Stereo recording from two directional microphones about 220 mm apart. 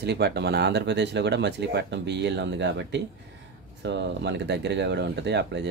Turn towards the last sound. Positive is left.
turn(degrees=-50)  # may be behind; listen again after turning